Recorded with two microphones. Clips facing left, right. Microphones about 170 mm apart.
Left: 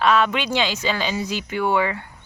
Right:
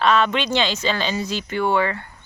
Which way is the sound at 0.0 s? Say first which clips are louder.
Even; 5° left (ahead or behind).